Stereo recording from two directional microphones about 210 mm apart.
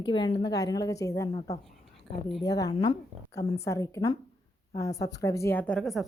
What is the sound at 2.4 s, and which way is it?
Speech, 15° left (ahead or behind).